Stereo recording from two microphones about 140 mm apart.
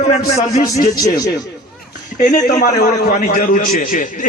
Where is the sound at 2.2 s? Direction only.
60° left (ahead or behind).